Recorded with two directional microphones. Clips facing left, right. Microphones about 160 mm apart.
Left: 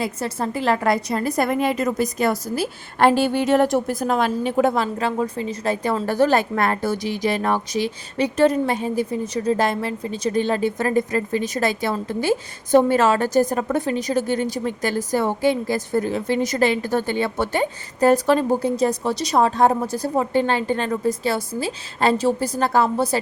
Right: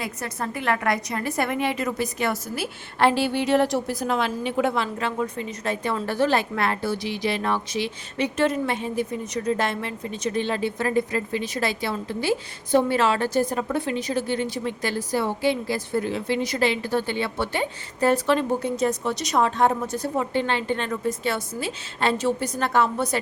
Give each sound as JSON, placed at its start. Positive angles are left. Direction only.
{"t": 0.0, "sound": "a woman's voice", "side_deg": 30}